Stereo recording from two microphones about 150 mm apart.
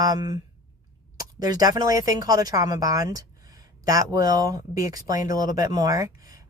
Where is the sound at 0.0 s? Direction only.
25° right (ahead or behind).